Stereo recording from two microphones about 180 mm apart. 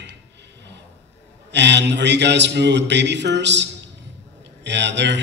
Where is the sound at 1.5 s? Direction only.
75° right (ahead or behind).